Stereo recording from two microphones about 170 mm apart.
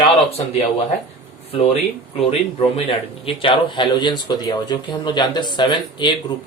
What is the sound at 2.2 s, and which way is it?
Speech, 35° left (ahead or behind).